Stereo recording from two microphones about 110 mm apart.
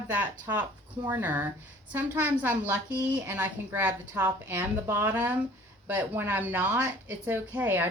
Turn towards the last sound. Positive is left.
turn(degrees=-15)  # may be behind; listen again after turning